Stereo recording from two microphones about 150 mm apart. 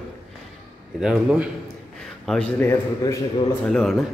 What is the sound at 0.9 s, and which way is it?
Speech, 5° right (ahead or behind).